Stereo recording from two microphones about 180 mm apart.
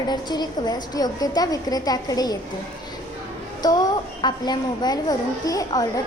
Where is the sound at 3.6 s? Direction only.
20° left (ahead or behind).